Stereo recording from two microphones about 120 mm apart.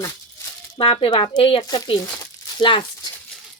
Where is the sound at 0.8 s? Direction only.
45° left (ahead or behind).